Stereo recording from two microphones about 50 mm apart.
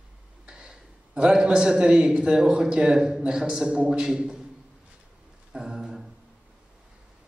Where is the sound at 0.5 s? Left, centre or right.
Centre.